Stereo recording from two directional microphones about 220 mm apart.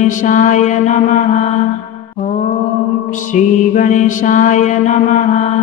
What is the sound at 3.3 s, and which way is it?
Mantra, 35° left (ahead or behind).